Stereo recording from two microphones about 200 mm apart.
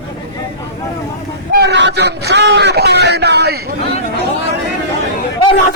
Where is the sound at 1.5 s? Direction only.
60° right (ahead or behind).